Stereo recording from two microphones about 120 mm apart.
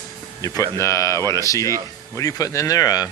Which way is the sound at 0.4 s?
30° left (ahead or behind).